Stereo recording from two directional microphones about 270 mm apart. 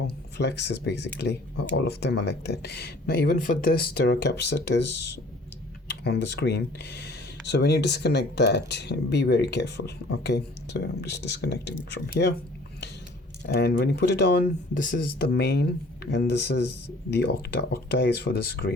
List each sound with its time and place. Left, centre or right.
0.3 s speech: left
5.9 s speech: left
13.5 s speech: left